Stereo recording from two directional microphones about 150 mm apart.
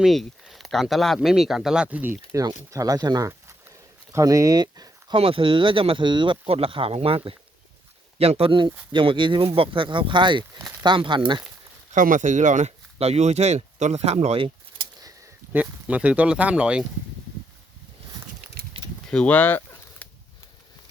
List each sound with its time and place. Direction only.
0.0 s speech: centre (ahead or behind)
2.7 s speech: 25° right (ahead or behind)
11.9 s speech: 60° right (ahead or behind); by 14.8 s 35° right (ahead or behind)
15.5 s speech: 10° right (ahead or behind)
19.1 s a sound: 10° left (ahead or behind)